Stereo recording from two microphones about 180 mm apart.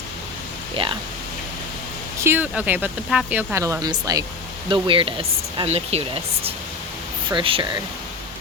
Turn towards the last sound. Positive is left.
turn(degrees=-30)  # may be behind; listen again after turning